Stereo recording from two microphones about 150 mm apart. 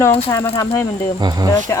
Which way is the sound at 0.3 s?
15° left (ahead or behind).